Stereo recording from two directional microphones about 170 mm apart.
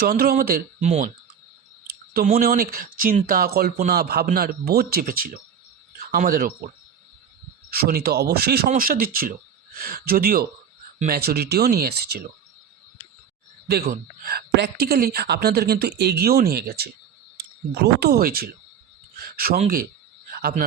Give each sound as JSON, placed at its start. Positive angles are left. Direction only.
{"t": 0.0, "sound": "speech", "side_deg": -60}
{"t": 0.8, "sound": "speech", "side_deg": -40}
{"t": 2.4, "sound": "speech", "side_deg": -60}
{"t": 7.7, "sound": "speech", "side_deg": -65}
{"t": 13.7, "sound": "speech", "side_deg": -60}
{"t": 19.2, "sound": "a sound", "side_deg": -60}
{"t": 19.6, "sound": "a man's voice", "side_deg": -55}